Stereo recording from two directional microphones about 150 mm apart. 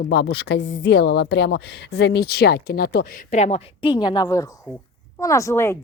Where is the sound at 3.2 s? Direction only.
50° left (ahead or behind).